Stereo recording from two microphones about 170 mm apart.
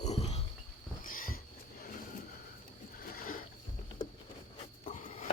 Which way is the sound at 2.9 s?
55° left (ahead or behind).